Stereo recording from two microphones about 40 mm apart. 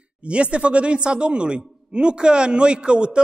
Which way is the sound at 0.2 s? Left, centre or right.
Right.